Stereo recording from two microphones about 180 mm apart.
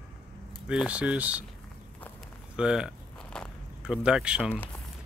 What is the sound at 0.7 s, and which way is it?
Speech, 5° right (ahead or behind).